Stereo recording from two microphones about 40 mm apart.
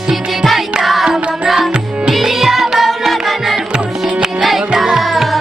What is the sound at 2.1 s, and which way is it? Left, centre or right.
Music, centre.